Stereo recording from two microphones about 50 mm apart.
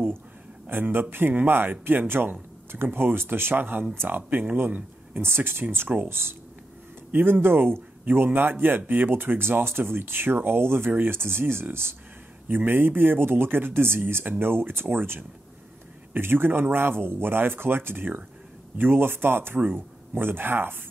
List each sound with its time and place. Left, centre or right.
0.7 s speech: right
5.2 s speech: right
7.1 s speech: right